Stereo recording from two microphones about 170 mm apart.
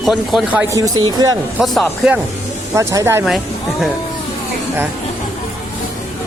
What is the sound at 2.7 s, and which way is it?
Speech, 15° right (ahead or behind).